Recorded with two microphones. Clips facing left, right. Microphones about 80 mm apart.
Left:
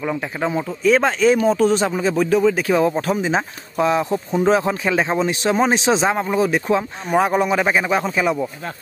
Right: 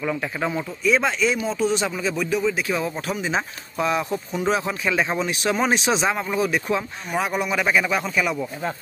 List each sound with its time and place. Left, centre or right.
0.0 s speech: left
0.8 s speech: left